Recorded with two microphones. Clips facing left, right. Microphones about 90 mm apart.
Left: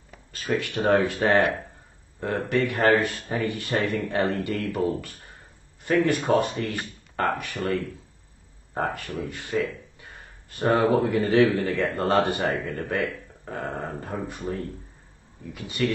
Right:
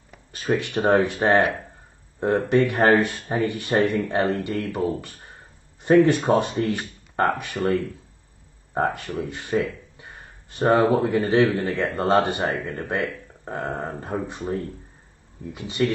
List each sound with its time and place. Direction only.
0.3 s speech: 20° right (ahead or behind)